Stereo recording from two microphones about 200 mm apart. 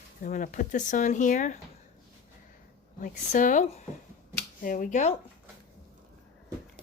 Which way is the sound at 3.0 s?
40° left (ahead or behind).